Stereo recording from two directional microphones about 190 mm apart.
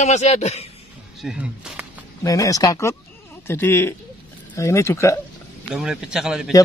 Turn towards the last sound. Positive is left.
turn(degrees=0)  # may be behind; listen again after turning